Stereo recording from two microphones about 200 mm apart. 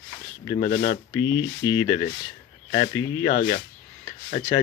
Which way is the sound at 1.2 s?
15° left (ahead or behind).